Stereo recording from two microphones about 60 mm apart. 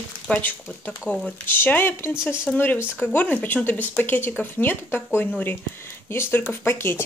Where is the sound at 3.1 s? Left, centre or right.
Left.